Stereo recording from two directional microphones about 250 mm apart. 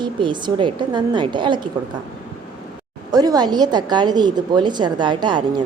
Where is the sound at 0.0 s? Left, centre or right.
Centre.